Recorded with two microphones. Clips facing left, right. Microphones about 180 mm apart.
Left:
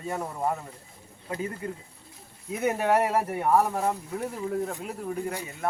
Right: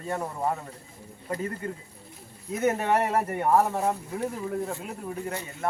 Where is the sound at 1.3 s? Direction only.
5° left (ahead or behind).